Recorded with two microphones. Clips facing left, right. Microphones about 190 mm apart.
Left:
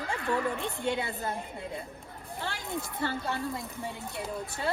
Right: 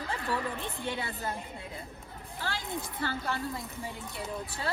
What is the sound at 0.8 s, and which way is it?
Speech, 15° left (ahead or behind).